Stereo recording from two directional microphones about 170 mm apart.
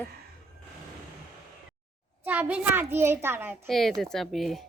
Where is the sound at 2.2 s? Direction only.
10° right (ahead or behind).